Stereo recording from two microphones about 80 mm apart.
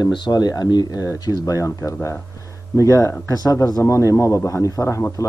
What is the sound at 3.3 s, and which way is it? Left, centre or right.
A man's voice, left.